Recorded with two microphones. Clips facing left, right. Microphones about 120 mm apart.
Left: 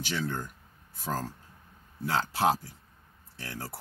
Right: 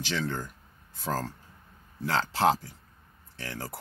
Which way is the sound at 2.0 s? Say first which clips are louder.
Right 2 dB; 90° right.